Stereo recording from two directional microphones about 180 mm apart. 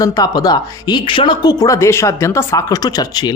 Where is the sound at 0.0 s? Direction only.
20° left (ahead or behind).